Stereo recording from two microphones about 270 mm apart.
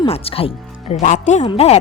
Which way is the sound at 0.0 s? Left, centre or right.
Left.